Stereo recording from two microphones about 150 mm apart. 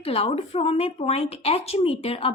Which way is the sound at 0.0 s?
40° left (ahead or behind).